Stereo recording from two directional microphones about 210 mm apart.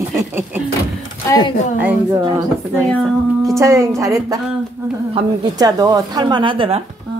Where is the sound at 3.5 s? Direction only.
15° right (ahead or behind).